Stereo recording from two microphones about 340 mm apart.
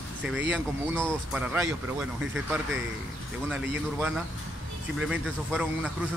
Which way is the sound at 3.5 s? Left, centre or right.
Centre.